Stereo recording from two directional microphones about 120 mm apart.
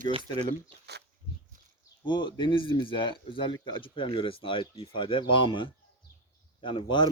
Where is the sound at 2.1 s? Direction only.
40° left (ahead or behind).